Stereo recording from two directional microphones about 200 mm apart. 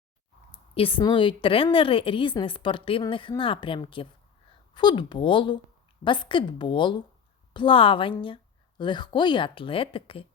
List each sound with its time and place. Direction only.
0.5 s speech: 25° left (ahead or behind)